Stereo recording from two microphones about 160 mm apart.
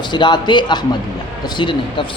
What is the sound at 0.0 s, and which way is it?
A man's voice, 30° left (ahead or behind).